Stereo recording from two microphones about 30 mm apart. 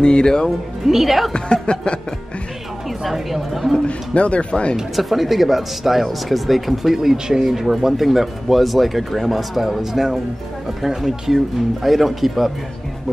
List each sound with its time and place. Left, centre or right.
0.0 s speech: left
0.8 s speech: centre
1.3 s speech: left
3.0 s speech: centre
3.8 s speech: left
4.9 s speech: centre
7.0 s speech: centre
7.4 s speech: centre